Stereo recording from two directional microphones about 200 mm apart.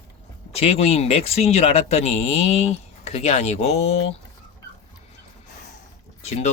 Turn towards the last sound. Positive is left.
turn(degrees=35)  # may be behind; listen again after turning